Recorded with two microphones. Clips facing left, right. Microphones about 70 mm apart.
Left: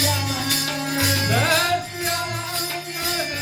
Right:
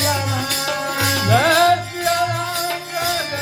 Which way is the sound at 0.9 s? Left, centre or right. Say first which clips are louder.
Right 5 dB; right.